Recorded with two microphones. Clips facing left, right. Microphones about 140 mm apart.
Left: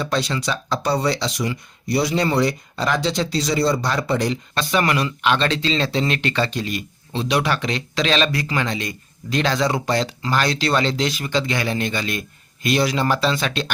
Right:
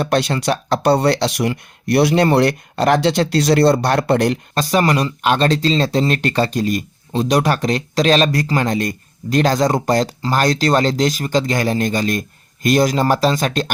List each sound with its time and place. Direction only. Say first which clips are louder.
0.0 s speech: right 5 dB; 60° right (ahead or behind)
4.5 s speech: right 3 dB; 40° right (ahead or behind)